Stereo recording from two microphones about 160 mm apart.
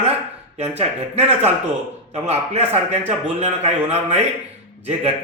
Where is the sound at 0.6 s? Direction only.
40° right (ahead or behind).